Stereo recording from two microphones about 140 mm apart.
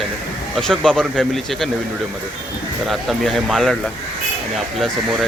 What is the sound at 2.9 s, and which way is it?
Speech, centre (ahead or behind).